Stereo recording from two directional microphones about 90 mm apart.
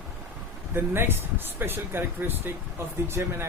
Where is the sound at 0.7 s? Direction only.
25° right (ahead or behind).